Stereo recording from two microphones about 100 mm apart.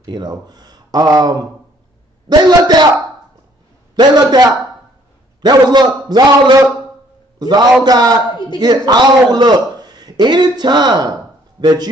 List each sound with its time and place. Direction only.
0.0 s a man's voice: 45° right (ahead or behind)
3.9 s a man's voice: 45° right (ahead or behind)